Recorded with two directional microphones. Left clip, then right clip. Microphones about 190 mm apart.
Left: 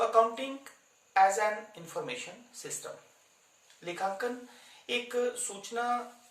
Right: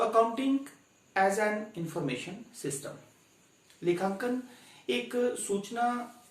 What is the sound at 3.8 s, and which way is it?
Speech, 15° left (ahead or behind).